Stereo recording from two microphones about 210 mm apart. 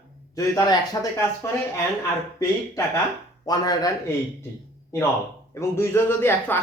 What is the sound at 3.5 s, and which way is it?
Speech, 20° left (ahead or behind).